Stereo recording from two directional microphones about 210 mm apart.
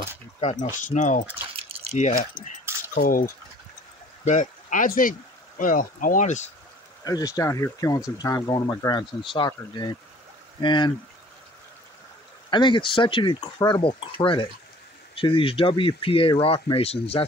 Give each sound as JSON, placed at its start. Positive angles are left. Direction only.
{"t": 0.4, "sound": "speech", "side_deg": 30}
{"t": 1.6, "sound": "drip", "side_deg": -30}
{"t": 2.0, "sound": "speech", "side_deg": 35}
{"t": 7.1, "sound": "speech", "side_deg": 15}
{"t": 10.6, "sound": "speech", "side_deg": 20}
{"t": 12.4, "sound": "speech", "side_deg": 20}